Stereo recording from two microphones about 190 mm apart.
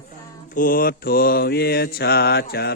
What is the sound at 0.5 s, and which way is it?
Mantra, 45° left (ahead or behind).